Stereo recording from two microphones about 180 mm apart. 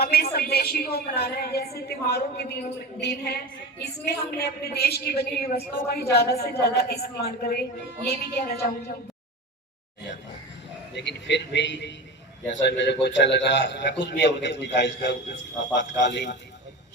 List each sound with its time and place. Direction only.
0.0 s a sound: 60° left (ahead or behind)
0.3 s a woman's voice: 60° left (ahead or behind)
4.0 s a woman's voice: 65° left (ahead or behind)
10.9 s a man's voice: 75° left (ahead or behind)